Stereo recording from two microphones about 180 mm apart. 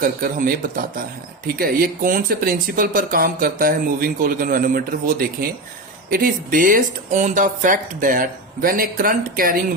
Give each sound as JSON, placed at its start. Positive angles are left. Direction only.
{"t": 0.0, "sound": "speech", "side_deg": -50}